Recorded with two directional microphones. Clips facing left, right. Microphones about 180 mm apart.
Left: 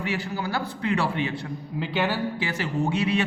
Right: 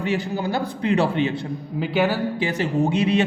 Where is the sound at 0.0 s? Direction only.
20° right (ahead or behind).